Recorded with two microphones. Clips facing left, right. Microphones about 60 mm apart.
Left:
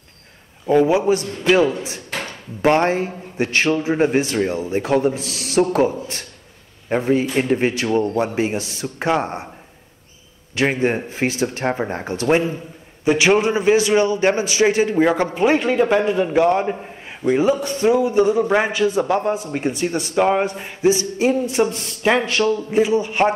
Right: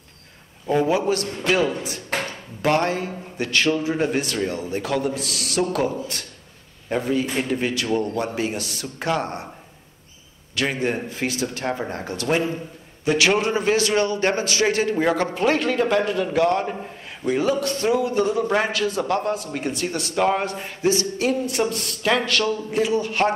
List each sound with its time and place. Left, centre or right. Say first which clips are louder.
0.7 s a man's voice: left 5 dB; centre
10.5 s a man's voice: left 5 dB; left